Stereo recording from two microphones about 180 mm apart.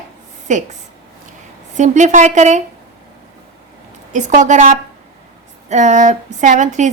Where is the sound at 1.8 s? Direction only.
40° right (ahead or behind).